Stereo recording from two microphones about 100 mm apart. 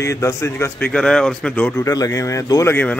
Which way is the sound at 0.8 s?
10° left (ahead or behind).